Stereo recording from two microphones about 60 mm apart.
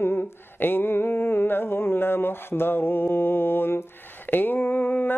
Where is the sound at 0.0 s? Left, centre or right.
Left.